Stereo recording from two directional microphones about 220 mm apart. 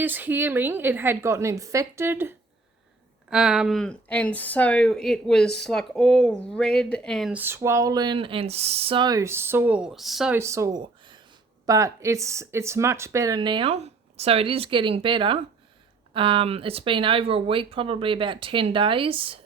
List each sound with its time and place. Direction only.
0.0 s a woman's voice: 10° right (ahead or behind); by 19.5 s 25° right (ahead or behind)